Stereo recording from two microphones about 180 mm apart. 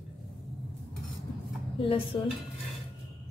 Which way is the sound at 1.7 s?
30° left (ahead or behind).